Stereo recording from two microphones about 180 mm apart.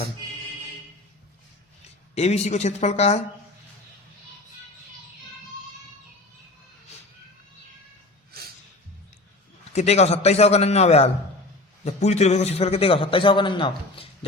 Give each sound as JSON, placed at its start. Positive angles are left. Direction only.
{"t": 2.1, "sound": "a man's voice", "side_deg": 35}
{"t": 8.3, "sound": "a sound", "side_deg": -60}
{"t": 9.7, "sound": "a man's voice", "side_deg": 35}